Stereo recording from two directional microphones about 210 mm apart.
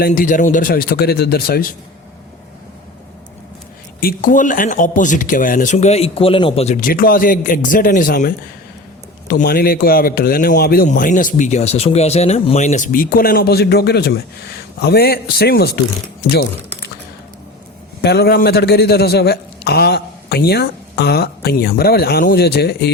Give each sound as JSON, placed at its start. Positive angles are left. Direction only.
{"t": 0.0, "sound": "a man's voice", "side_deg": 40}
{"t": 4.0, "sound": "speech", "side_deg": 40}
{"t": 6.7, "sound": "a man's voice", "side_deg": 40}
{"t": 18.0, "sound": "a man's voice", "side_deg": 50}